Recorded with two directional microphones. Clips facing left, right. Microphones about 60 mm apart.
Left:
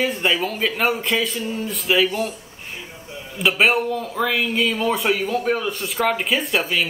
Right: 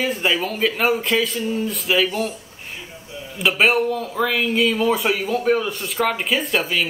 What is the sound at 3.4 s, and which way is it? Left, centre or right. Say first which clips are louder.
Speech: right 1 dB; centre.